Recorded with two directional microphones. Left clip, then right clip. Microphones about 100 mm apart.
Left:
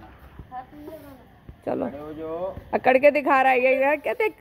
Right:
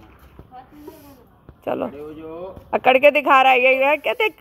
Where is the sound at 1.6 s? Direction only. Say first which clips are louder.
Right 3 dB; 15° right (ahead or behind).